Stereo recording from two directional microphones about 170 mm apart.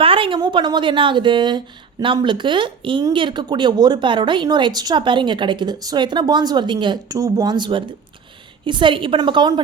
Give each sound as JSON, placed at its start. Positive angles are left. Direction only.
{"t": 0.0, "sound": "a woman's voice", "side_deg": -30}